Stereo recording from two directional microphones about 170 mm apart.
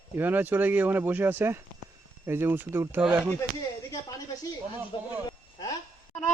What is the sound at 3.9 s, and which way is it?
Speech, 20° left (ahead or behind).